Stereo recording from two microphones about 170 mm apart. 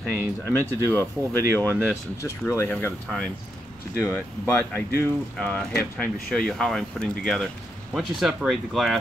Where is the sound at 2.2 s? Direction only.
15° left (ahead or behind).